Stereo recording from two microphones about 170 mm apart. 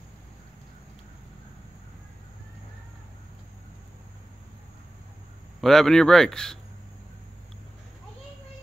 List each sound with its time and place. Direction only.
5.6 s speech: centre (ahead or behind)